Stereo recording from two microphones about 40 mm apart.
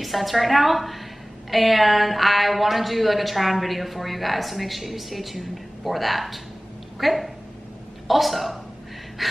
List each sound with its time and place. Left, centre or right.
0.0 s a woman's voice: centre